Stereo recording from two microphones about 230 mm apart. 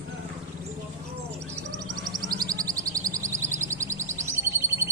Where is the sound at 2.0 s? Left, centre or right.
Centre.